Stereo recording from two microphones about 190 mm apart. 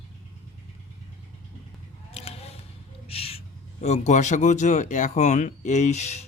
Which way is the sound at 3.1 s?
30° left (ahead or behind).